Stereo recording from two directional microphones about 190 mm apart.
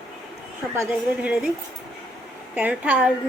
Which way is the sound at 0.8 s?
5° right (ahead or behind).